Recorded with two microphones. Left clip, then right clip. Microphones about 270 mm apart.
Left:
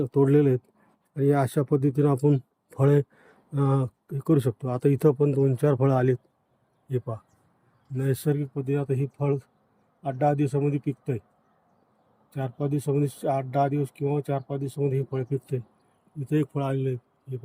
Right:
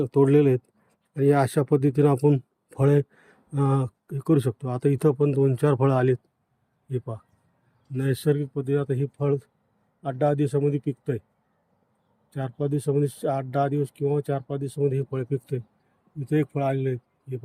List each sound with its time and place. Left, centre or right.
0.0 s a man's voice: centre
12.3 s speech: centre